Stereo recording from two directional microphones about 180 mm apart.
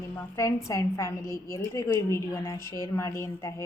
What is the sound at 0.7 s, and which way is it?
A woman's voice, 15° left (ahead or behind).